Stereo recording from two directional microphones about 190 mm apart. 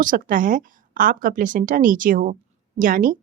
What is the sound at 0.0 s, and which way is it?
Speech, 45° right (ahead or behind).